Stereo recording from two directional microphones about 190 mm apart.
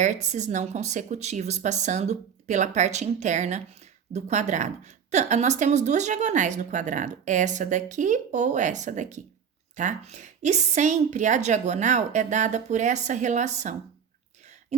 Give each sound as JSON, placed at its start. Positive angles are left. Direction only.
{"t": 0.0, "sound": "speech", "side_deg": -40}